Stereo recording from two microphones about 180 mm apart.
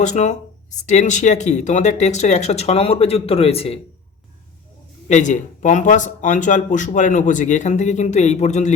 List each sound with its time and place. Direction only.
0.0 s speech: 40° left (ahead or behind)
5.0 s speech: 40° left (ahead or behind)